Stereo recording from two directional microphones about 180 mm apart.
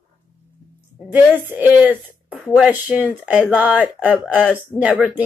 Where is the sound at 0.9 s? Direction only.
10° right (ahead or behind).